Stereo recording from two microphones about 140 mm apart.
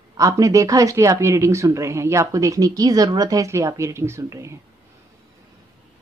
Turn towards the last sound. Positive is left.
turn(degrees=-20)  # may be behind; listen again after turning